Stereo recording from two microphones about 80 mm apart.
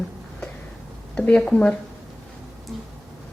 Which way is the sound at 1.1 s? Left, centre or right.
Centre.